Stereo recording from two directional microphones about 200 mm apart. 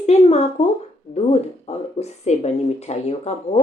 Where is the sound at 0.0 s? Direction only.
35° left (ahead or behind).